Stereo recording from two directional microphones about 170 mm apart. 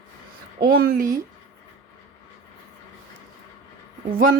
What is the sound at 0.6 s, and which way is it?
Speech, 65° right (ahead or behind).